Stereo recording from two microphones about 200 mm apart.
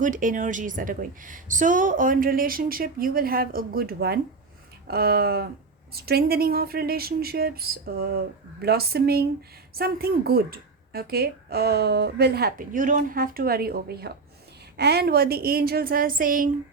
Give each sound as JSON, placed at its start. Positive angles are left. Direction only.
{"t": 0.0, "sound": "a woman's voice", "side_deg": -40}